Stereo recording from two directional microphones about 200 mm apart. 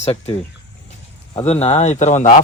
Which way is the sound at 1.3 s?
30° left (ahead or behind).